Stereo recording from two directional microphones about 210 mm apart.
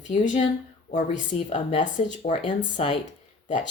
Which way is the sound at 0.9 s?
35° left (ahead or behind).